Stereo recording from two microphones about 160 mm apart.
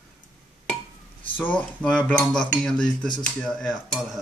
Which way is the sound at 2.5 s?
5° left (ahead or behind).